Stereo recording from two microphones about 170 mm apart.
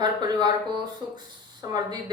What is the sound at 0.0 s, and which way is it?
Speech, 25° right (ahead or behind).